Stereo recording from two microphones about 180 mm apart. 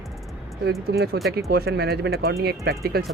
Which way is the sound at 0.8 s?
60° right (ahead or behind).